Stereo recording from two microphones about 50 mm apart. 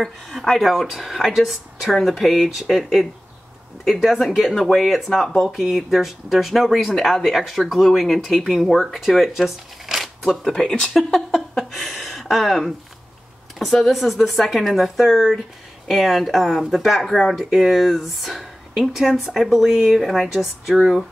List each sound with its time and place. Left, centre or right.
0.0 s speech: centre
11.1 s speech: centre